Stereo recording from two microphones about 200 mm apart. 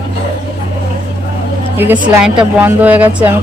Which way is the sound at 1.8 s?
5° right (ahead or behind).